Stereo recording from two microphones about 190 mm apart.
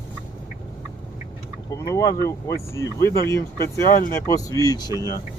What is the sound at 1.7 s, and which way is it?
Speech, 15° left (ahead or behind).